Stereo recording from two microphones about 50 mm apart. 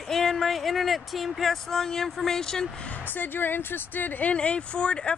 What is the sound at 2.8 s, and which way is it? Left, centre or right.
Speech, left.